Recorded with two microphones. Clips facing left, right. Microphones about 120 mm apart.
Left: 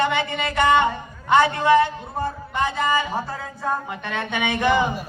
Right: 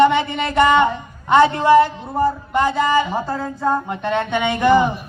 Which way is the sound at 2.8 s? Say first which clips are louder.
Right 5 dB; 30° right (ahead or behind).